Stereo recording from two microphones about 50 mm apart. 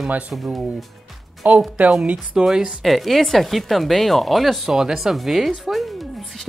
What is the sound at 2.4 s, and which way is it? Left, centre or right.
Speech, centre.